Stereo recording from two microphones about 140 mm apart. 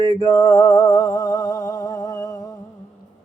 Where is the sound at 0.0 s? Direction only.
25° left (ahead or behind).